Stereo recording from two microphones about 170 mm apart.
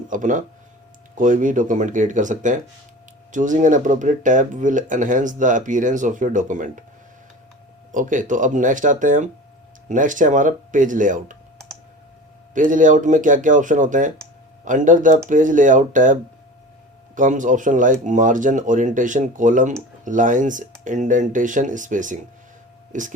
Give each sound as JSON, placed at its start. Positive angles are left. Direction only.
{"t": 0.1, "sound": "speech", "side_deg": -50}
{"t": 7.9, "sound": "speech", "side_deg": -50}
{"t": 12.5, "sound": "speech", "side_deg": -50}
{"t": 17.2, "sound": "speech", "side_deg": -50}